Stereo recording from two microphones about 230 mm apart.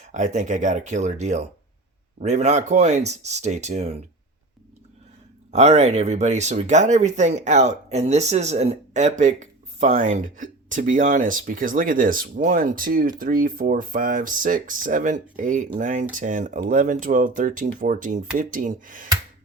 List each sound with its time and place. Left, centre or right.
0.1 s speech: right
5.5 s speech: right